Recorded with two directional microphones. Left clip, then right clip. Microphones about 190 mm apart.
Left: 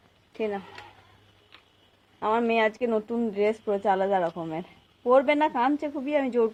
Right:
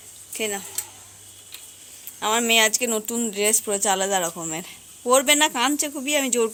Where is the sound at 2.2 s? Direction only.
10° right (ahead or behind).